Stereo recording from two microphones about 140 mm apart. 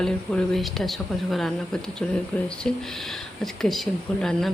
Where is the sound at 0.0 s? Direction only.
Centre (ahead or behind).